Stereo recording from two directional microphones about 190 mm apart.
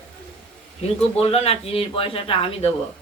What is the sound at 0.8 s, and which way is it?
Speech, 30° left (ahead or behind).